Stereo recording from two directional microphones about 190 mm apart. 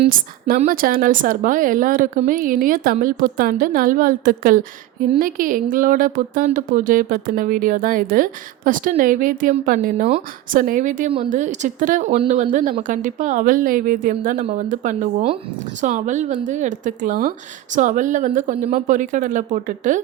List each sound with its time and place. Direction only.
0.1 s speech: 45° right (ahead or behind)